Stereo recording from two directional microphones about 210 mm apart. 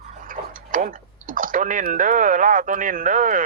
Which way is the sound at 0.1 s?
40° right (ahead or behind).